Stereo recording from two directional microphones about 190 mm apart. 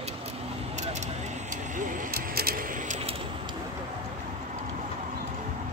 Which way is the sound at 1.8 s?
45° right (ahead or behind).